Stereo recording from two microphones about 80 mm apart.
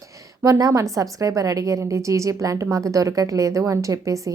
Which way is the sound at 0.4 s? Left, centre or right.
Right.